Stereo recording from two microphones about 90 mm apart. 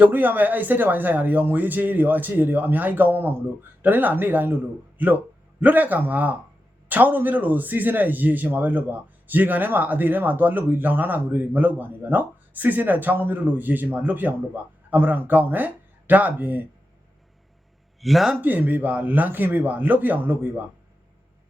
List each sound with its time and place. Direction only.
0.0 s a man's voice: 20° right (ahead or behind)
18.0 s a man's voice: centre (ahead or behind)
18.3 s a man's voice: 20° right (ahead or behind)